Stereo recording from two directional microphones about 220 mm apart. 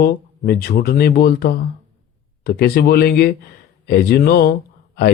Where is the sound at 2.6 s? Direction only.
45° left (ahead or behind).